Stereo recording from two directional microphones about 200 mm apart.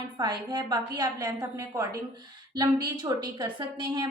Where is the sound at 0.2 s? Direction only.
20° right (ahead or behind).